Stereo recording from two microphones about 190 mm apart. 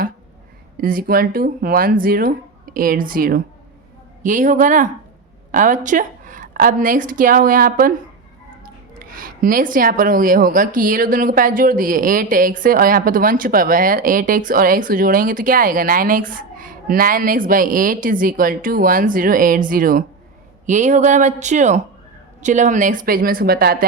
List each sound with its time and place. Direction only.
0.8 s a woman's voice: 50° right (ahead or behind)
9.0 s speech: 45° right (ahead or behind)